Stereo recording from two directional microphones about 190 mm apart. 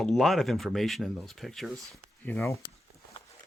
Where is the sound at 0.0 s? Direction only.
Centre (ahead or behind).